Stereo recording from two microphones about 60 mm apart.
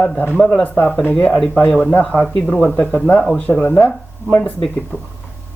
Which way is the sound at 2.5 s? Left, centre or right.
Left.